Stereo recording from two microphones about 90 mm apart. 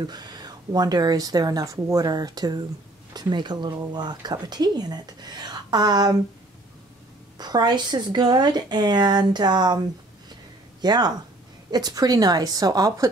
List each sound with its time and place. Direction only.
0.0 s speech: 50° right (ahead or behind)
7.3 s speech: 50° right (ahead or behind)